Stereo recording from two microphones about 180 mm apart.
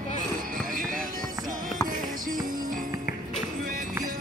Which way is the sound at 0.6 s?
50° right (ahead or behind).